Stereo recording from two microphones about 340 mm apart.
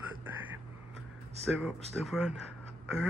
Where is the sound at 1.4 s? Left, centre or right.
Centre.